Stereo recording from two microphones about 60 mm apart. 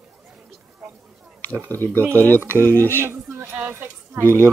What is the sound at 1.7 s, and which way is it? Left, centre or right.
Speech, left.